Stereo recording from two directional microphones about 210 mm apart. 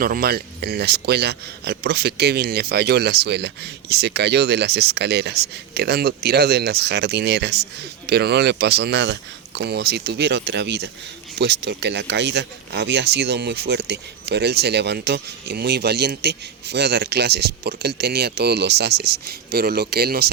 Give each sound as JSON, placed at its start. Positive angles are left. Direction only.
{"t": 0.0, "sound": "speech", "side_deg": -45}